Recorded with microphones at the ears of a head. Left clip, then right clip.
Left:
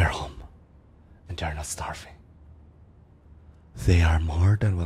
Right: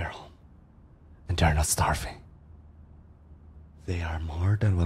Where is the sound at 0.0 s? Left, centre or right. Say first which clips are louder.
Left 10 dB; left.